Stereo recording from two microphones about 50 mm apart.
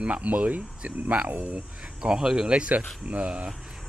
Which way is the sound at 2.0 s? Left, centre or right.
Centre.